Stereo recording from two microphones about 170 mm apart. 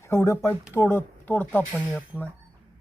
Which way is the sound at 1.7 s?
5° right (ahead or behind).